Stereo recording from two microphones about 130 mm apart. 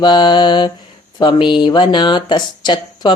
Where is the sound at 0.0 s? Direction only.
35° left (ahead or behind).